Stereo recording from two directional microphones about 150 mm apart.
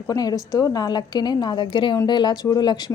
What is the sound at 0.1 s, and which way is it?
A woman's voice, 25° left (ahead or behind).